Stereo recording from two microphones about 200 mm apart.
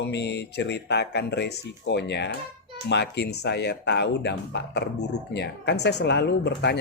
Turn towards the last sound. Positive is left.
turn(degrees=60)  # may be behind; listen again after turning